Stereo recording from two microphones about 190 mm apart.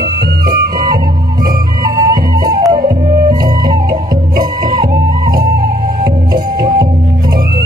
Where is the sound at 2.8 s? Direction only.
45° right (ahead or behind).